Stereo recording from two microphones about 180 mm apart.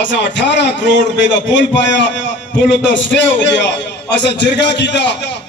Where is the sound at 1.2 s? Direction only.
90° left.